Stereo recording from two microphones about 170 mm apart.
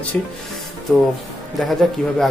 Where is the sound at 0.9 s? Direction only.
5° left (ahead or behind).